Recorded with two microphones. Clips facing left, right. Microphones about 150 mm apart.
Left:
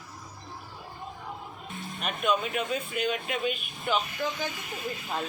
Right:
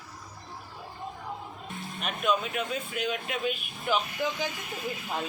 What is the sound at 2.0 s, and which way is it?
Speech, centre (ahead or behind).